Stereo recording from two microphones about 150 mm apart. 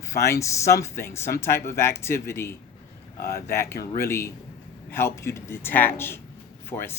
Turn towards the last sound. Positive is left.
turn(degrees=15)  # may be behind; listen again after turning